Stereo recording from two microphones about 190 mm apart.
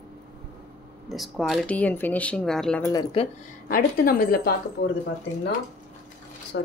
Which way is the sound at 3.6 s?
50° left (ahead or behind).